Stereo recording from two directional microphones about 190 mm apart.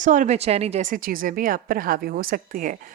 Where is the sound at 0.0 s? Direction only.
40° right (ahead or behind).